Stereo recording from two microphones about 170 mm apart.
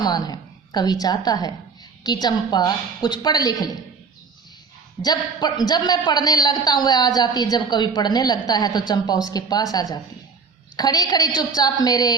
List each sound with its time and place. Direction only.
0.0 s a man's voice: 25° left (ahead or behind)
5.0 s a man's voice: 25° left (ahead or behind)
10.8 s a man's voice: 25° left (ahead or behind)